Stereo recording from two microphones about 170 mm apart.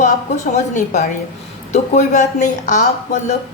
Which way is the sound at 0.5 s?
45° left (ahead or behind).